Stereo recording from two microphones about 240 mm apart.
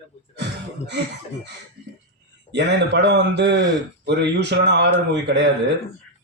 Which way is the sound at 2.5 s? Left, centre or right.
Right.